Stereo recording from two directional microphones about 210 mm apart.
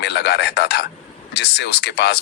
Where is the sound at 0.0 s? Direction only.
55° left (ahead or behind).